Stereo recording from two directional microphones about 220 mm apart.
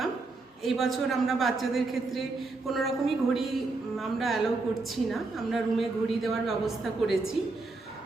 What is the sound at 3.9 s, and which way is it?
A woman's voice, centre (ahead or behind).